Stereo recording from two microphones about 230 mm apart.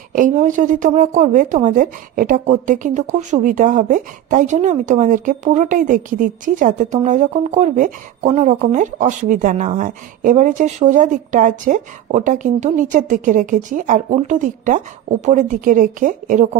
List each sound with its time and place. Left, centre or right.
0.1 s a woman's voice: right